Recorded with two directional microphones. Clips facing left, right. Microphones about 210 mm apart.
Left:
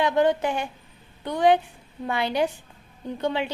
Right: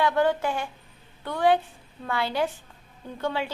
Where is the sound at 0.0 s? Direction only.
20° left (ahead or behind).